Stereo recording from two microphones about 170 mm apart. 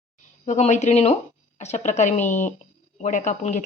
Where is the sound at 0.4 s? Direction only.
45° left (ahead or behind).